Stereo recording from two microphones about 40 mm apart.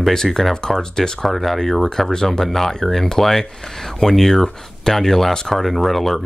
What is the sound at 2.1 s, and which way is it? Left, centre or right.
Speech, centre.